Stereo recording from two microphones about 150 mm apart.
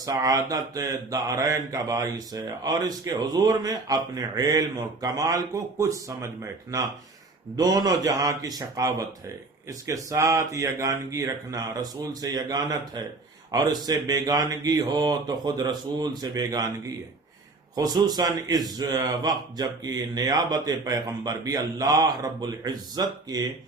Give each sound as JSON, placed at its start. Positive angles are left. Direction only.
{"t": 0.0, "sound": "a man's voice", "side_deg": -25}
{"t": 17.7, "sound": "a man's voice", "side_deg": -25}